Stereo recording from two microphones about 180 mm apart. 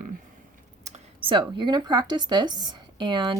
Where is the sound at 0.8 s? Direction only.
35° right (ahead or behind).